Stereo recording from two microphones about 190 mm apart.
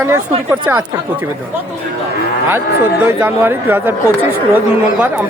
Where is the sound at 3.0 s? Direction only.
10° right (ahead or behind).